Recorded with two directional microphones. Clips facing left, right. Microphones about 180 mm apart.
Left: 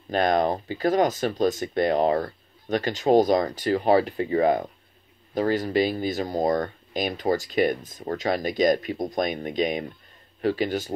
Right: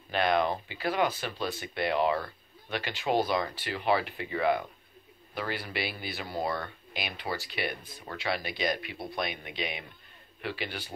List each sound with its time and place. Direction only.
0.1 s speech: 40° left (ahead or behind)